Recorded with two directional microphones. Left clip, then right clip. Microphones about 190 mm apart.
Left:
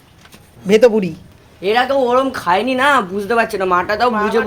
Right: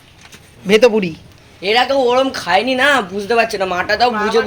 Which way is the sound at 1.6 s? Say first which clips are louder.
Right 1 dB; 50° left (ahead or behind).